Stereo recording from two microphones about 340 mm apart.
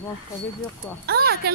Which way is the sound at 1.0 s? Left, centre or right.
Right.